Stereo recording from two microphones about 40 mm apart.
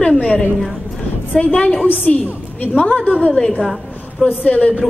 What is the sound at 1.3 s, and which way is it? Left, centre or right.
Speech, left.